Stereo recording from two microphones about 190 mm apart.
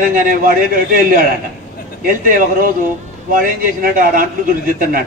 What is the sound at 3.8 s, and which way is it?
A man's voice, 45° right (ahead or behind).